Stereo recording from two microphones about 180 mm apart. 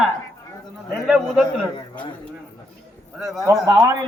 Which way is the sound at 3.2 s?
Centre (ahead or behind).